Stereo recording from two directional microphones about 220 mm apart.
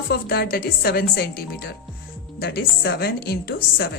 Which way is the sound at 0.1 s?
45° left (ahead or behind).